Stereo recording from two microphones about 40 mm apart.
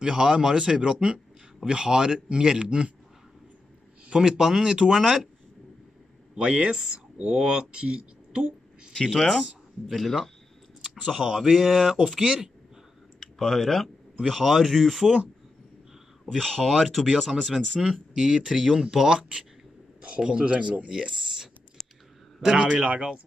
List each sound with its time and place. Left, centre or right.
0.0 s speech: centre
4.1 s speech: centre
6.5 s speech: right
8.9 s speech: centre
10.8 s speech: centre
13.2 s speech: centre
16.3 s speech: centre
18.1 s speech: centre
18.5 s speech: centre
20.2 s speech: right
21.8 s clicking: centre
22.4 s speech: right